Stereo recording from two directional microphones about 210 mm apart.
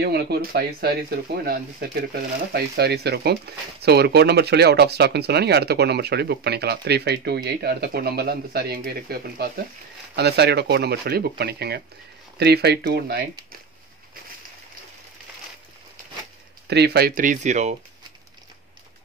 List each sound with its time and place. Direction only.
0.0 s speech: 50° right (ahead or behind)
16.6 s speech: 50° right (ahead or behind); by 17.7 s 35° right (ahead or behind)